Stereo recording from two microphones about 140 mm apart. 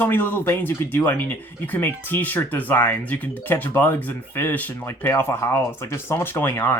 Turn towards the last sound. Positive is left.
turn(degrees=15)  # may be behind; listen again after turning